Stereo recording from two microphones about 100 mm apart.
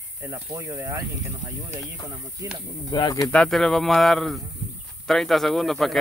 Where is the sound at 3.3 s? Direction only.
5° left (ahead or behind).